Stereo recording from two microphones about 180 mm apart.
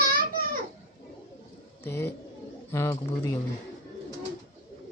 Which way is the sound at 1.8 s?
15° left (ahead or behind).